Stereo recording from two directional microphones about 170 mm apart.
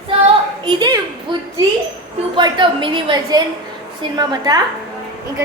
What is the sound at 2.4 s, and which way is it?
A woman's voice, 30° right (ahead or behind).